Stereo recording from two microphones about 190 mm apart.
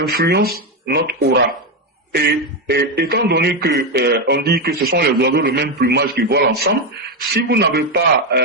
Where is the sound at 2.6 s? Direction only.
60° right (ahead or behind).